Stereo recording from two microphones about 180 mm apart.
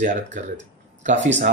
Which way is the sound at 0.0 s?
45° right (ahead or behind).